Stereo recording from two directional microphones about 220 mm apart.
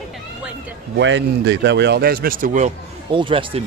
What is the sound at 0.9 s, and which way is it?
Speech, 55° right (ahead or behind).